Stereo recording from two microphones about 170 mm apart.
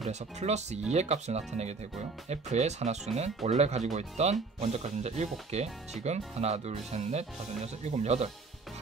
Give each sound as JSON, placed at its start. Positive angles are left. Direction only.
{"t": 0.0, "sound": "speech", "side_deg": -40}